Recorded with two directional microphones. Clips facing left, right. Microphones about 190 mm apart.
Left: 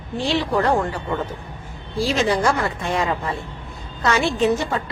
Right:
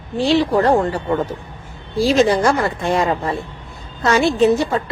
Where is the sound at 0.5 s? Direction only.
30° right (ahead or behind).